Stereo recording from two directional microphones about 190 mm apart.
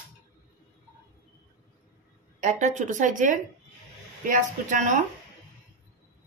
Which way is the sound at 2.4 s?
40° right (ahead or behind).